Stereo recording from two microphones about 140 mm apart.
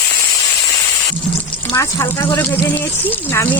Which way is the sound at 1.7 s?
20° left (ahead or behind).